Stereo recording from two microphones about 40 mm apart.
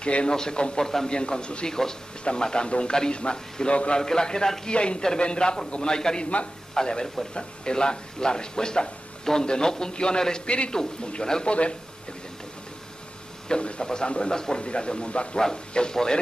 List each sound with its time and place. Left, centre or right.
0.0 s speech: left
4.0 s a man's voice: centre
13.5 s speech: left